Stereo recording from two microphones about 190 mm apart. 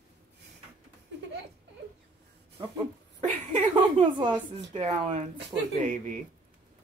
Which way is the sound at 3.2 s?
35° right (ahead or behind).